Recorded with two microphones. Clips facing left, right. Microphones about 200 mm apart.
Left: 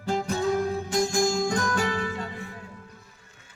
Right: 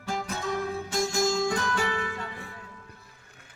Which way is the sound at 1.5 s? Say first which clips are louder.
Left 2 dB; 40° left (ahead or behind).